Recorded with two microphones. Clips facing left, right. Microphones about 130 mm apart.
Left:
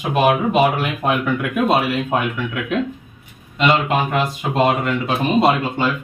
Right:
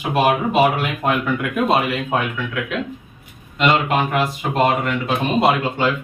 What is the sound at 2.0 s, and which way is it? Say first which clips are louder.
Speech: left 1 dB; 15° left (ahead or behind).